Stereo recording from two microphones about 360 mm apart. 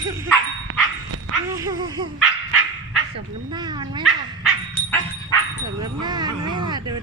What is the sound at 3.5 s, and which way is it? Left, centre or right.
Speech, centre.